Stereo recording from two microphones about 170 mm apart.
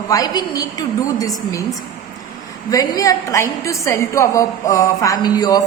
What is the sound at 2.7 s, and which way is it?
A woman's voice, 20° left (ahead or behind).